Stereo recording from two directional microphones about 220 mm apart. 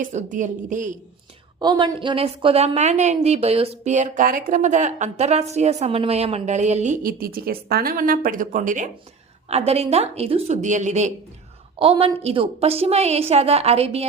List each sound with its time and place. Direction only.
0.0 s speech: 35° right (ahead or behind)
1.5 s a woman's voice: 20° right (ahead or behind)